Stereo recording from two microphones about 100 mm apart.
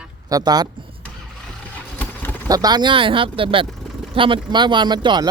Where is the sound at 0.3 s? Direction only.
40° right (ahead or behind).